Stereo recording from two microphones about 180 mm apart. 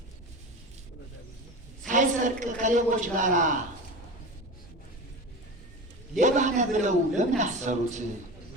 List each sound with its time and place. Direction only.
1.9 s a man's voice: 45° right (ahead or behind)
6.1 s a man's voice: 40° right (ahead or behind)